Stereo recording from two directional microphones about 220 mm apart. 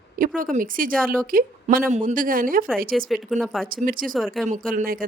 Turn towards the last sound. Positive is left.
turn(degrees=-40)  # may be behind; listen again after turning